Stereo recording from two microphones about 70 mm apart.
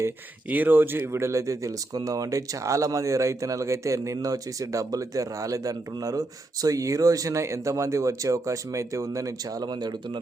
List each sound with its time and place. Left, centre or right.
0.4 s speech: right